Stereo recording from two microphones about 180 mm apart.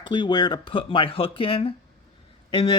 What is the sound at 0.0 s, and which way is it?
Speech, 25° left (ahead or behind).